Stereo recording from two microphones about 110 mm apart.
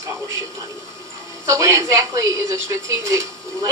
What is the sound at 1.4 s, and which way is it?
Speech, 25° right (ahead or behind).